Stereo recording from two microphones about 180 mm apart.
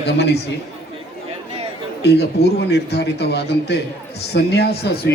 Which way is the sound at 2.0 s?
65° left (ahead or behind).